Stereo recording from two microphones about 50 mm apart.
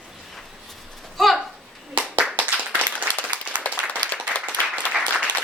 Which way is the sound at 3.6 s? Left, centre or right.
Left.